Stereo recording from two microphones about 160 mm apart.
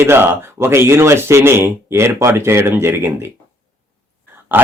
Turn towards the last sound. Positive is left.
turn(degrees=-15)  # may be behind; listen again after turning